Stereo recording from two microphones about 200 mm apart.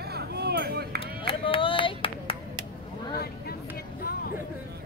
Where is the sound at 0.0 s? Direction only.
50° right (ahead or behind).